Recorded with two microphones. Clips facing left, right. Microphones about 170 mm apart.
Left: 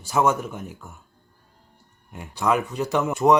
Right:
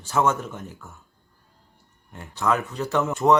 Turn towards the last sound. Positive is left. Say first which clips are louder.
# left 1 dB
turn(degrees=15)  # may be behind; listen again after turning